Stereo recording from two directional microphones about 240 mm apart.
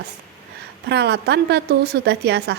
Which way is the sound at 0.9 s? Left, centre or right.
Right.